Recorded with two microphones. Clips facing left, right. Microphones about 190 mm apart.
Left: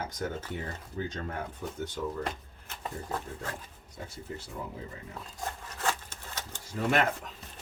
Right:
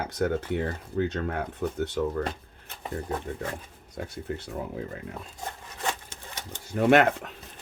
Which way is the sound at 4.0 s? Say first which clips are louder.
Right 7 dB; 70° right (ahead or behind).